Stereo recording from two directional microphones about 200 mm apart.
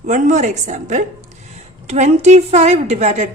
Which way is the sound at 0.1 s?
35° right (ahead or behind).